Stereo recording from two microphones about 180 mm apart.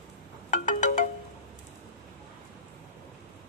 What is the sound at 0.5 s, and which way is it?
Music, 45° left (ahead or behind).